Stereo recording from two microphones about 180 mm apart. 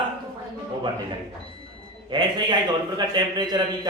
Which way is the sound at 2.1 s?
25° right (ahead or behind).